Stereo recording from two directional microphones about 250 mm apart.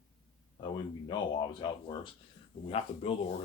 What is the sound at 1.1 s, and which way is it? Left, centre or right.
Speech, centre.